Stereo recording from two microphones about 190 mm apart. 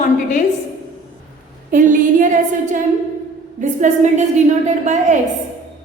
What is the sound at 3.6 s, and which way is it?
A woman's voice, 40° right (ahead or behind).